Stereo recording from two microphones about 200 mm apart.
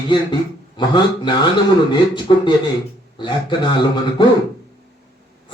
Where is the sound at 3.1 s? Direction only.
25° left (ahead or behind).